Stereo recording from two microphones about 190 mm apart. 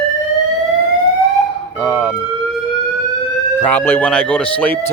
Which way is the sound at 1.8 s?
5° left (ahead or behind).